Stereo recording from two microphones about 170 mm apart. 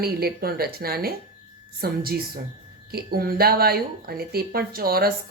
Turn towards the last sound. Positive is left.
turn(degrees=-60)  # may be behind; listen again after turning